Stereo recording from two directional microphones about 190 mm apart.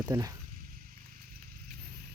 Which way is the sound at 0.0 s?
20° right (ahead or behind).